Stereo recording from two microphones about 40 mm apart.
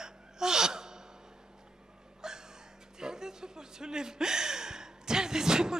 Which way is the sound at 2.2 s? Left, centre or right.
Centre.